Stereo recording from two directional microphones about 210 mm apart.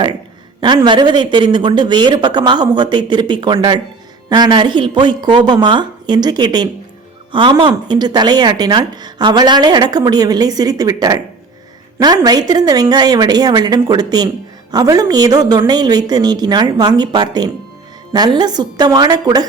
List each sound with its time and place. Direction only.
0.6 s a woman's voice: 20° right (ahead or behind)